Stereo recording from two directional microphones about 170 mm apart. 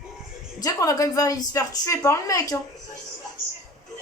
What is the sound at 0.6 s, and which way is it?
A woman's voice, 20° left (ahead or behind).